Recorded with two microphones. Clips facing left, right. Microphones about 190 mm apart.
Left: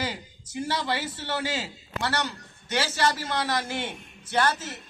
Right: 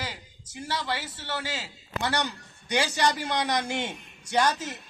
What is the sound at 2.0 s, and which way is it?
A man's voice, 15° right (ahead or behind).